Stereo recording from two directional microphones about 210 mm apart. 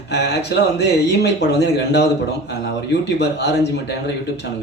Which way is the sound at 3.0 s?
55° left (ahead or behind).